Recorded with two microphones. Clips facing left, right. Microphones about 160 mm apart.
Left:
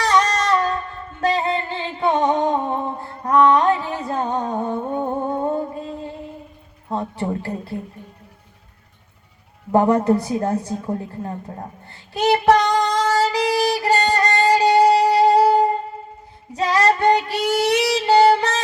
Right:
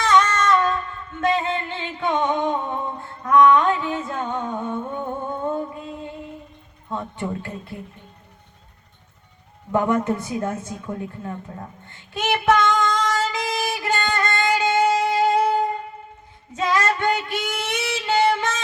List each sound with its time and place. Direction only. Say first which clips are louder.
0.0 s music: even; 35° left (ahead or behind)
6.8 s speech: left 4 dB; 35° left (ahead or behind)
9.7 s a sound: left 5 dB; 35° left (ahead or behind)
16.5 s child singing: left 4 dB; 35° left (ahead or behind)